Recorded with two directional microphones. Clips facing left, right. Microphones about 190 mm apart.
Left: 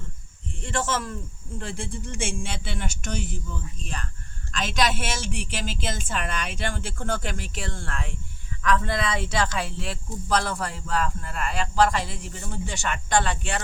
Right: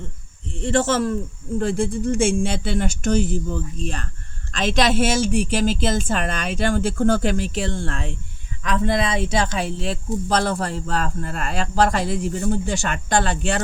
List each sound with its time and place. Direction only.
0.6 s speech: 30° right (ahead or behind)